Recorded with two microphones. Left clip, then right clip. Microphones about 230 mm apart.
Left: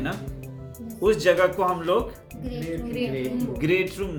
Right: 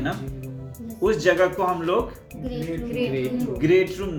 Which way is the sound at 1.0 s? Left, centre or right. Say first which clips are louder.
Even; left.